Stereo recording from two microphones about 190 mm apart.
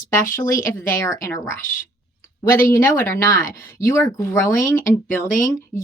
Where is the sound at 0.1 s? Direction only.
15° left (ahead or behind).